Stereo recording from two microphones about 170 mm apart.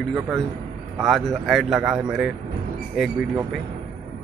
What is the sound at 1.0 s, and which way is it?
Speech, centre (ahead or behind).